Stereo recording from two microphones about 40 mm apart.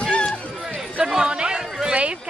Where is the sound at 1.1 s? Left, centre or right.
Right.